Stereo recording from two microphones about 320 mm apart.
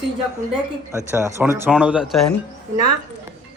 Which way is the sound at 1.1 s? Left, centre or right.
Centre.